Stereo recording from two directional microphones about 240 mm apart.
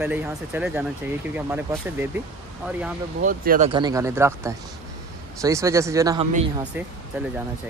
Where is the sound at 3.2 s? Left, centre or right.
Right.